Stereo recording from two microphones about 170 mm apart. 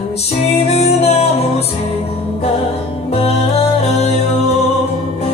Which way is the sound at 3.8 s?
40° left (ahead or behind).